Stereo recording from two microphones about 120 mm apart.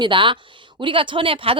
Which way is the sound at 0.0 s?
45° right (ahead or behind).